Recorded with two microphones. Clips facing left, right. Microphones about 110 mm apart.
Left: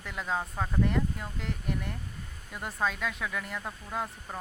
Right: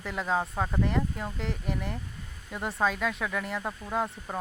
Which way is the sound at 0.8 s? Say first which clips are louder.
Left 3 dB; centre (ahead or behind).